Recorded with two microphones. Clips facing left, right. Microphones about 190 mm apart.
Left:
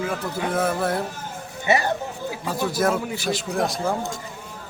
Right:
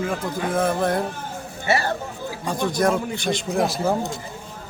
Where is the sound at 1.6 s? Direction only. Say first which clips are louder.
Left 1 dB; 20° left (ahead or behind).